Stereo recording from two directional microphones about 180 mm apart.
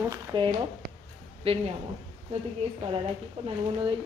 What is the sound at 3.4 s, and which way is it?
Speech, 40° right (ahead or behind).